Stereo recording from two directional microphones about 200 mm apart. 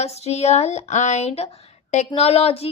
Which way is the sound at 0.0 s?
30° left (ahead or behind).